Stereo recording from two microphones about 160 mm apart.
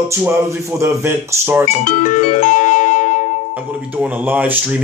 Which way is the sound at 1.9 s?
50° left (ahead or behind).